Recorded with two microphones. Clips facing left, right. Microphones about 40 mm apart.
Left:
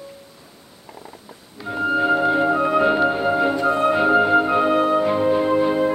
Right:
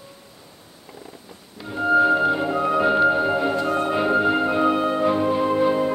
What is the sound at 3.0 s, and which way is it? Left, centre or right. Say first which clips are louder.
Music: even; centre.